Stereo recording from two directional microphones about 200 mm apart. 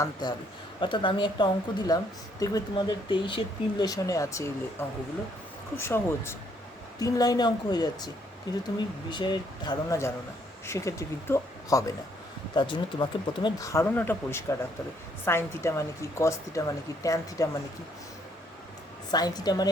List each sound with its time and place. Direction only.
0.0 s a woman's voice: 20° left (ahead or behind)
19.1 s a woman's voice: 20° left (ahead or behind)